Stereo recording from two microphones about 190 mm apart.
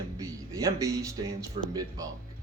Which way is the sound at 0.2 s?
15° right (ahead or behind).